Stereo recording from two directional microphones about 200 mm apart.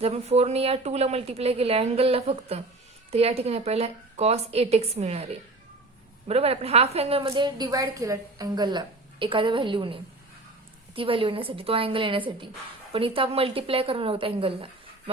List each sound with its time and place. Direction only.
0.0 s a woman's voice: 30° right (ahead or behind)